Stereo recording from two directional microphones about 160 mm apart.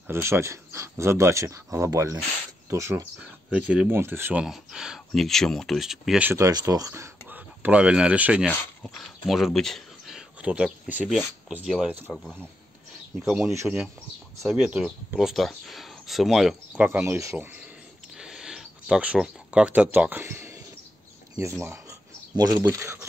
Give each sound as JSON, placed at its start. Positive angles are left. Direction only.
{"t": 0.0, "sound": "speech", "side_deg": -15}
{"t": 3.2, "sound": "speech", "side_deg": -5}
{"t": 6.3, "sound": "speech", "side_deg": -20}
{"t": 12.1, "sound": "speech", "side_deg": 5}
{"t": 13.5, "sound": "speech", "side_deg": -15}
{"t": 14.5, "sound": "speech", "side_deg": -5}
{"t": 18.1, "sound": "a sound", "side_deg": -5}
{"t": 21.4, "sound": "speech", "side_deg": -15}